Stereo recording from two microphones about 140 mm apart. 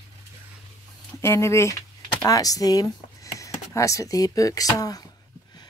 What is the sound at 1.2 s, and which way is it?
Speech, 20° left (ahead or behind).